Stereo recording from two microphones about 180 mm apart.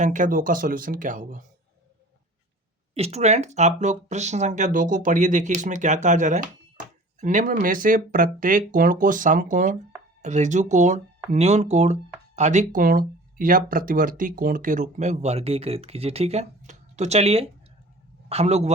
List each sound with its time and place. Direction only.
0.0 s speech: 45° right (ahead or behind)
2.9 s speech: 35° right (ahead or behind)